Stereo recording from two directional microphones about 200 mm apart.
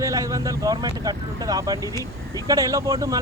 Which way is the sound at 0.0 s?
15° right (ahead or behind).